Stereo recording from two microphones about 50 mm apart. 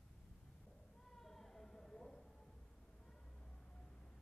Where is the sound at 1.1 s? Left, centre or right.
Centre.